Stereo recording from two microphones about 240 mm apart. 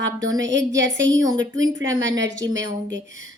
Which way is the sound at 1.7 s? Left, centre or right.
Right.